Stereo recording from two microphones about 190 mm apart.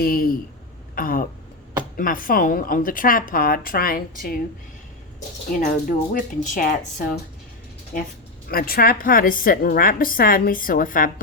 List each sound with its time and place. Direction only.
0.0 s a woman's voice: 50° left (ahead or behind)
0.9 s a sound: 50° left (ahead or behind)
2.0 s a woman's voice: 50° left (ahead or behind)
5.5 s a woman's voice: 45° left (ahead or behind)